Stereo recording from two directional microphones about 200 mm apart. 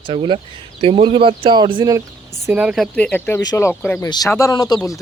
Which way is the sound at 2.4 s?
5° right (ahead or behind).